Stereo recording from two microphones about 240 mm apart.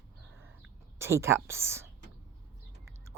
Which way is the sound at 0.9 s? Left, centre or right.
Centre.